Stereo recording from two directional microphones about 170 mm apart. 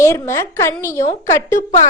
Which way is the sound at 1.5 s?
45° left (ahead or behind).